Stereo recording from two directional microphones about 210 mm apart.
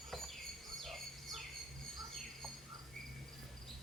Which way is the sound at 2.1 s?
Centre (ahead or behind).